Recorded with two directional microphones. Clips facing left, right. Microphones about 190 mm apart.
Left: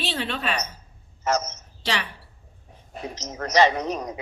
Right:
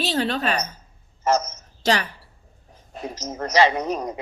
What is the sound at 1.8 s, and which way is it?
Speech, 40° right (ahead or behind).